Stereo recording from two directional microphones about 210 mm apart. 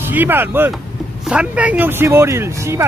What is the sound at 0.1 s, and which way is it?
Speech, 10° right (ahead or behind).